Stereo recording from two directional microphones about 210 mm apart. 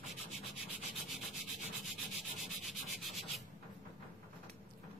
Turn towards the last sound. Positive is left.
turn(degrees=0)  # may be behind; listen again after turning